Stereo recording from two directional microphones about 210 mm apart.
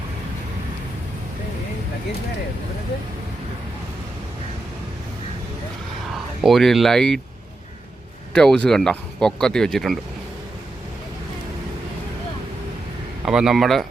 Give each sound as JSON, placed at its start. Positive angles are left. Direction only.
{"t": 6.4, "sound": "speech", "side_deg": 0}
{"t": 8.3, "sound": "speech", "side_deg": 5}
{"t": 13.2, "sound": "speech", "side_deg": -5}